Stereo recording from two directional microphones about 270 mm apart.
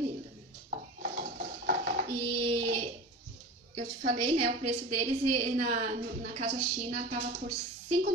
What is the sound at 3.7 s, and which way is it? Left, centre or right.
Speech, centre.